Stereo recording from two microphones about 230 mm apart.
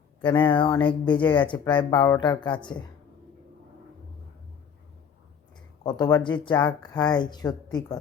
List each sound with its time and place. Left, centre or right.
0.3 s speech: left
5.8 s speech: centre